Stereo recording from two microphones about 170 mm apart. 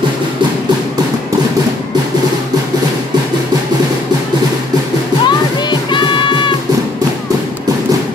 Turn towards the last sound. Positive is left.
turn(degrees=30)  # may be behind; listen again after turning